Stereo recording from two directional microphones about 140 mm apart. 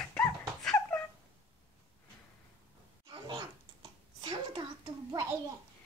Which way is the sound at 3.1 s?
35° right (ahead or behind).